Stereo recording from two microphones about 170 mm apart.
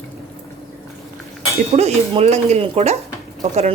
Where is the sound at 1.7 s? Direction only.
40° right (ahead or behind).